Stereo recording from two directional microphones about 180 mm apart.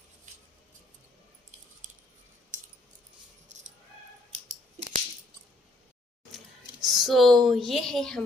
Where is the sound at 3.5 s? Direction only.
40° right (ahead or behind).